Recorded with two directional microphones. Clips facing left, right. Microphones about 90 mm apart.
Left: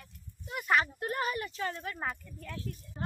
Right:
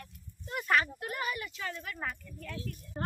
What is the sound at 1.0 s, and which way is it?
Speech, 35° left (ahead or behind).